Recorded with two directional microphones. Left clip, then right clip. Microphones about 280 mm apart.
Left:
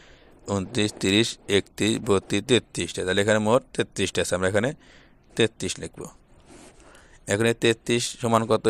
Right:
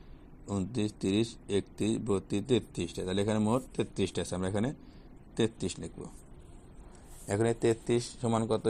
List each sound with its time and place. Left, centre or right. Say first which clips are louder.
0.5 s speech: left 9 dB; left
7.3 s a man's voice: left 7 dB; left
7.9 s speech: left 7 dB; left